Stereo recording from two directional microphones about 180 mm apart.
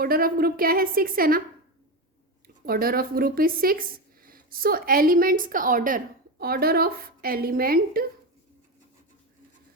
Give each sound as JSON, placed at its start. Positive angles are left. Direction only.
{"t": 0.0, "sound": "a woman's voice", "side_deg": -55}
{"t": 2.6, "sound": "a woman's voice", "side_deg": -55}